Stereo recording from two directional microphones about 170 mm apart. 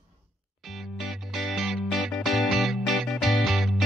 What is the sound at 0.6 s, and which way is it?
Music, centre (ahead or behind).